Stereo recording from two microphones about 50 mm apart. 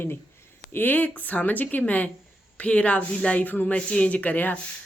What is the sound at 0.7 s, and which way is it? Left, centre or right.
Speech, left.